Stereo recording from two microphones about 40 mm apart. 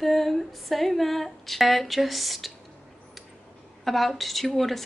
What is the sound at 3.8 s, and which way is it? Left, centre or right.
A woman's voice, centre.